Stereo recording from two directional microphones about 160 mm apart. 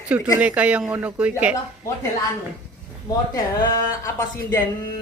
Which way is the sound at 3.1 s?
20° left (ahead or behind).